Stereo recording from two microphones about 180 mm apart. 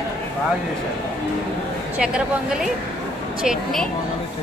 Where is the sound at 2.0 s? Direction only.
5° right (ahead or behind).